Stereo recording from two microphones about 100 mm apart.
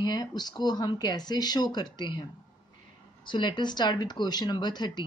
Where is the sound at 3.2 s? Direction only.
50° left (ahead or behind).